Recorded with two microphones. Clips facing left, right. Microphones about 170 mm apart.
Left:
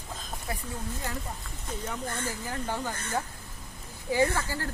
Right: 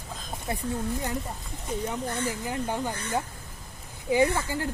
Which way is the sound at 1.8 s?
20° right (ahead or behind).